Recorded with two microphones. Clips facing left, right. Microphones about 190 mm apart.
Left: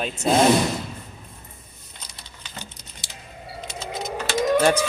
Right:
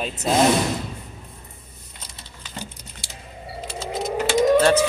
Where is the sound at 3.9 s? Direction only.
25° right (ahead or behind).